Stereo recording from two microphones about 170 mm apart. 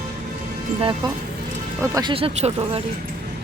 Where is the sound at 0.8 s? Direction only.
30° right (ahead or behind).